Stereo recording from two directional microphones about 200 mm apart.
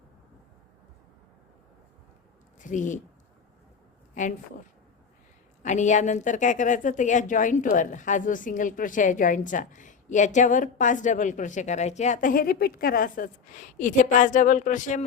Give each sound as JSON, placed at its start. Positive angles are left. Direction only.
{"t": 2.6, "sound": "speech", "side_deg": 40}
{"t": 4.1, "sound": "speech", "side_deg": 40}
{"t": 5.6, "sound": "speech", "side_deg": 35}